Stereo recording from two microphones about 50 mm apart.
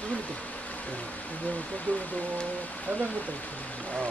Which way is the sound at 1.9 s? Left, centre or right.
Left.